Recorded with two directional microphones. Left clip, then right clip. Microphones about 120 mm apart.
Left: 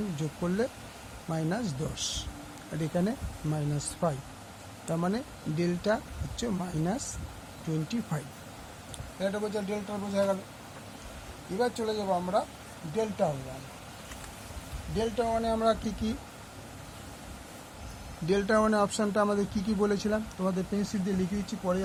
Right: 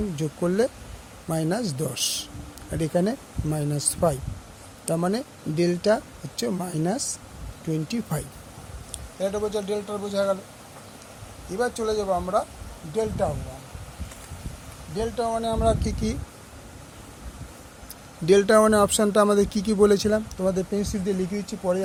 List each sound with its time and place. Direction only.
0.2 s speech: 55° right (ahead or behind)
9.2 s speech: 50° right (ahead or behind)
9.6 s speech: 65° right (ahead or behind)
11.5 s speech: 55° right (ahead or behind)
13.0 s speech: 35° right (ahead or behind)
14.9 s speech: 20° right (ahead or behind); by 16.1 s 40° right (ahead or behind)
18.3 s speech: 75° right (ahead or behind); by 21.8 s 50° right (ahead or behind)